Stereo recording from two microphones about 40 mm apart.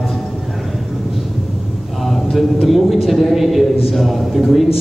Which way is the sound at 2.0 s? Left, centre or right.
Centre.